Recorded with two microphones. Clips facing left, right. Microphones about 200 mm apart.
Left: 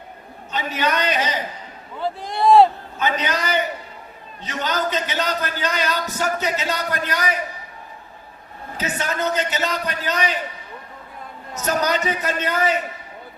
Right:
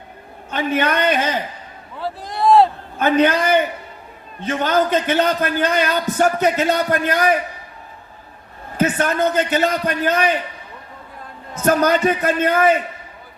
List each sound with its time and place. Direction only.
0.5 s a man's voice: 55° right (ahead or behind)
2.0 s a man's voice: centre (ahead or behind)
3.0 s a man's voice: 55° right (ahead or behind)
8.8 s a man's voice: 55° right (ahead or behind)
11.5 s a man's voice: 55° right (ahead or behind)